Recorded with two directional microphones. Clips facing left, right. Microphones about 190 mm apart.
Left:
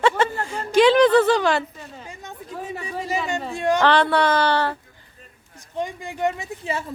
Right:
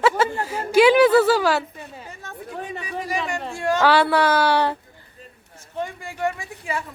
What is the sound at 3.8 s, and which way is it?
Speech, 5° right (ahead or behind).